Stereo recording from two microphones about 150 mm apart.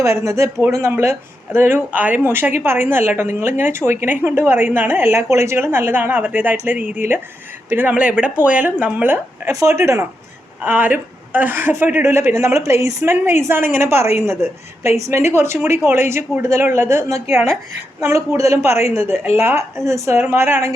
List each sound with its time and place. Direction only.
0.0 s a woman's voice: 20° right (ahead or behind)
18.3 s a woman's voice: 20° right (ahead or behind)